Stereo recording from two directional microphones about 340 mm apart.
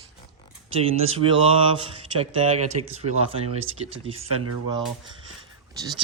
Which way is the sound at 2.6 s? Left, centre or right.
Right.